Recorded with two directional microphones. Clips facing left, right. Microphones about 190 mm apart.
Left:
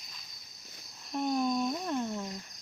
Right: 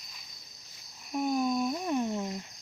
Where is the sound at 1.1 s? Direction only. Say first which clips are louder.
Right 1 dB; 5° right (ahead or behind).